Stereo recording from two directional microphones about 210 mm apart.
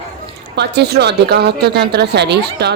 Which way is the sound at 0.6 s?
50° right (ahead or behind).